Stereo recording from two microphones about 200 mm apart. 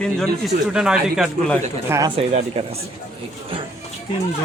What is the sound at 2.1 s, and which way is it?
Speech, 30° right (ahead or behind).